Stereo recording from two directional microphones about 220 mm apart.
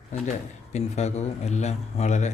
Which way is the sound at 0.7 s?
30° left (ahead or behind).